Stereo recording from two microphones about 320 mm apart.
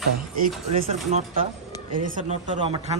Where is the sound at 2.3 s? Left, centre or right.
Centre.